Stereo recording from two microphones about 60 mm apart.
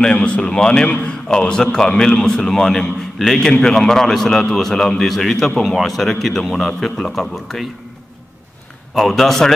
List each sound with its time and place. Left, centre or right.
0.0 s a man's voice: centre
8.9 s a man's voice: centre